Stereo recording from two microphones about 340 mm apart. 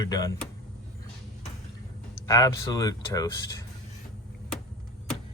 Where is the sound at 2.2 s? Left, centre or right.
Centre.